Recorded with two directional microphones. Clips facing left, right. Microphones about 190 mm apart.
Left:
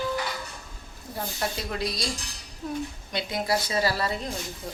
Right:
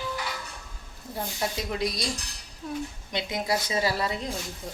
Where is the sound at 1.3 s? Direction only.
15° right (ahead or behind).